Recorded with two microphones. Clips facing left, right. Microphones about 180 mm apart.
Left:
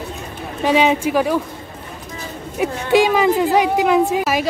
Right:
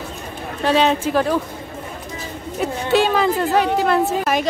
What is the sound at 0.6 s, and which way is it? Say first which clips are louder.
Speech: left 1 dB; 10° left (ahead or behind).